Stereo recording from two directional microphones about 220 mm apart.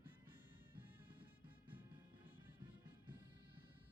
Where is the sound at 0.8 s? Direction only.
10° right (ahead or behind).